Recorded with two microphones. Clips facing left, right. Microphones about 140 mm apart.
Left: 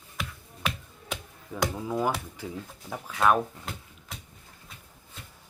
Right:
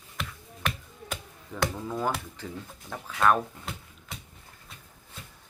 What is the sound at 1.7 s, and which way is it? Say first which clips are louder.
Speech: left 2 dB; 10° left (ahead or behind).